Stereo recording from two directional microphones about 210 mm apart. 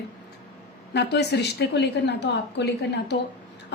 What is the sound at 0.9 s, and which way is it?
A woman's voice, 55° left (ahead or behind).